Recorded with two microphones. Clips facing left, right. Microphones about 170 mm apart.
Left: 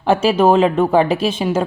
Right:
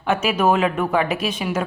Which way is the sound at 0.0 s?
30° left (ahead or behind).